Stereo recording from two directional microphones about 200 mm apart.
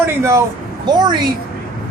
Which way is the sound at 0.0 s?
10° right (ahead or behind).